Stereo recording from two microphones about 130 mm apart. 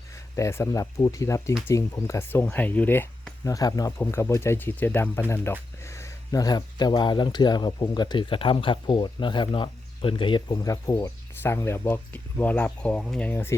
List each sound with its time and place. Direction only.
0.3 s speech: 20° left (ahead or behind)
3.4 s speech: 25° left (ahead or behind)
10.6 s speech: 25° left (ahead or behind)